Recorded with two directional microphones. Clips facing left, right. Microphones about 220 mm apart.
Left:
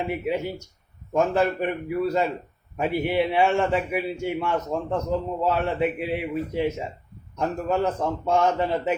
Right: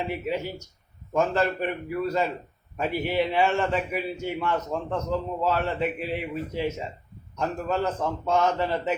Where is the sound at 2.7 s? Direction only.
15° left (ahead or behind).